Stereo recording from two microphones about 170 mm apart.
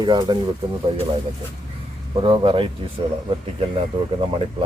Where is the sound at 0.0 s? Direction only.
25° right (ahead or behind).